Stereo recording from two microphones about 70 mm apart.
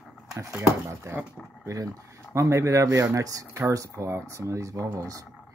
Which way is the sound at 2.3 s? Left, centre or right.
Right.